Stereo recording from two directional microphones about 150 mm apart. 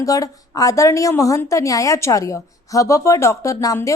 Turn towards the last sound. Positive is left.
turn(degrees=20)  # may be behind; listen again after turning